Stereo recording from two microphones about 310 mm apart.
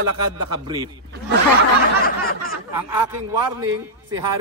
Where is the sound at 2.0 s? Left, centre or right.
Left.